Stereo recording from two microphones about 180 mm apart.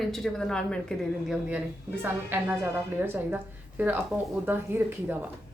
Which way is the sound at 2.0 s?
10° right (ahead or behind).